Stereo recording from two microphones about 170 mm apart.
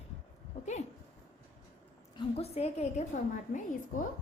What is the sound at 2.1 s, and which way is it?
Speech, 35° left (ahead or behind).